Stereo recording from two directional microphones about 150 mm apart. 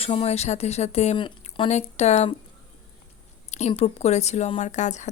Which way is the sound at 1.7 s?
45° left (ahead or behind).